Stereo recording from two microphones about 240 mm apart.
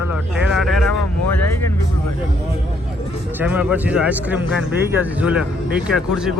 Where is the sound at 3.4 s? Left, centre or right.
Centre.